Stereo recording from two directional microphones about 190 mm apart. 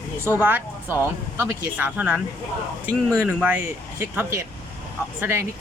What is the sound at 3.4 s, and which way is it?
Speech, 10° right (ahead or behind).